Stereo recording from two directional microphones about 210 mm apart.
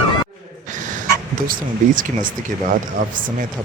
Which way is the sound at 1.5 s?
40° right (ahead or behind).